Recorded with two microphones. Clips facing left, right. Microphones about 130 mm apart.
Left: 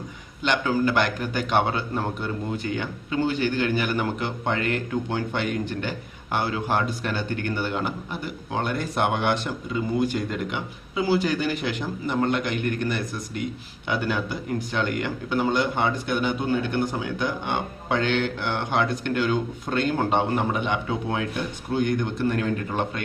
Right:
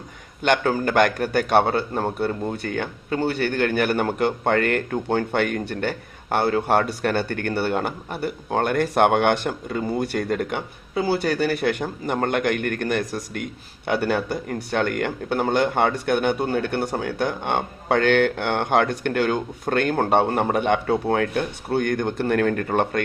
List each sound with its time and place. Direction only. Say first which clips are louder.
0.4 s a man's voice: right 2 dB; 55° right (ahead or behind)